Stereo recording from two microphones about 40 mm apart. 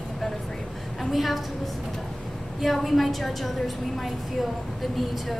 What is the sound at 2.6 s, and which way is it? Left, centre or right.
A woman's voice, centre.